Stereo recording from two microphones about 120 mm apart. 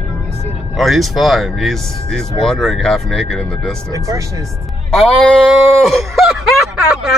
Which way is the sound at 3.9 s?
30° right (ahead or behind).